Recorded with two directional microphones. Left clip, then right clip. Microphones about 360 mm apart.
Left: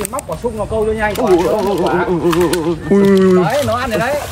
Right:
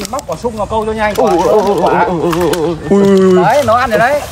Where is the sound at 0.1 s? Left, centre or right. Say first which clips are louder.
Right 3 dB; centre.